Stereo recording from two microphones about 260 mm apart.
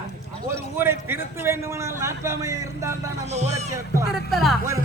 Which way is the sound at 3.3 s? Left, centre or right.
Right.